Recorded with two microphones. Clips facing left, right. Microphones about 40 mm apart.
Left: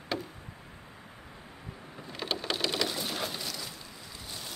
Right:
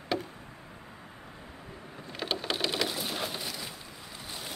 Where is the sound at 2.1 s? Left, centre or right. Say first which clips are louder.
Right 1 dB; centre.